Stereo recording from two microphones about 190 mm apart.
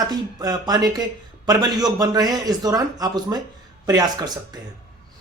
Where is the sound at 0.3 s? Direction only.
20° right (ahead or behind).